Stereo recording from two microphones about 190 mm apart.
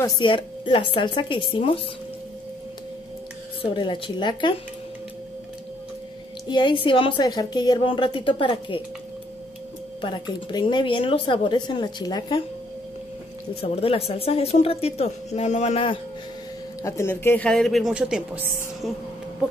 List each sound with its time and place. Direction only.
0.0 s speech: 25° left (ahead or behind)
3.7 s speech: 25° left (ahead or behind)
6.5 s speech: 25° left (ahead or behind)
10.0 s speech: 25° left (ahead or behind)
13.6 s a woman's voice: 30° left (ahead or behind)
16.8 s speech: 15° left (ahead or behind); by 18.5 s 5° right (ahead or behind)